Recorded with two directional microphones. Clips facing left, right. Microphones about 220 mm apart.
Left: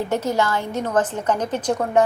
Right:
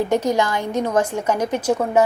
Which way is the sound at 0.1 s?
15° right (ahead or behind).